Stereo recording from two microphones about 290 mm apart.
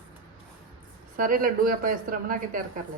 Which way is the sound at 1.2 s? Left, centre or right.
Right.